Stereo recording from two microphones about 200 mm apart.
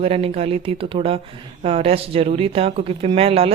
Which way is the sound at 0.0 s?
30° right (ahead or behind).